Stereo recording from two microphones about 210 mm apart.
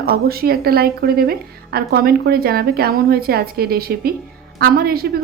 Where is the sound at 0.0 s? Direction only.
45° right (ahead or behind).